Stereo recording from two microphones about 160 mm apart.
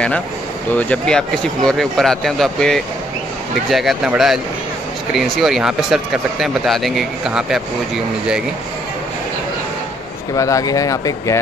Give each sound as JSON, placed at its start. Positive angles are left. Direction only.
{"t": 0.7, "sound": "speech", "side_deg": 5}
{"t": 10.3, "sound": "speech", "side_deg": 20}